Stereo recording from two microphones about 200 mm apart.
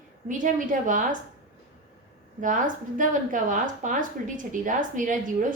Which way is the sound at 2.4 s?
40° right (ahead or behind).